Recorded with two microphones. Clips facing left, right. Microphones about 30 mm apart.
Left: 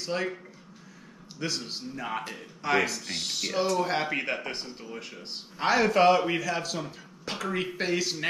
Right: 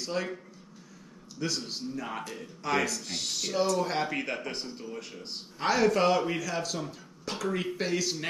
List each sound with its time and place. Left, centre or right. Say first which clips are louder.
0.0 s speech: left 2 dB; centre
1.4 s speech: even; centre